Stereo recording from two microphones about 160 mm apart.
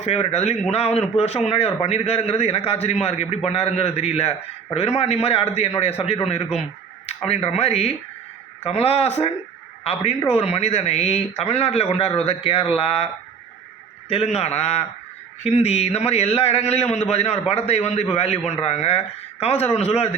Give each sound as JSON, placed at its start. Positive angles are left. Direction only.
{"t": 0.0, "sound": "a man's voice", "side_deg": 45}
{"t": 7.3, "sound": "a man's voice", "side_deg": 40}
{"t": 14.1, "sound": "a man's voice", "side_deg": 40}